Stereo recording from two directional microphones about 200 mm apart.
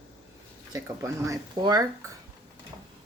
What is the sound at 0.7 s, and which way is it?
Speech, 15° right (ahead or behind).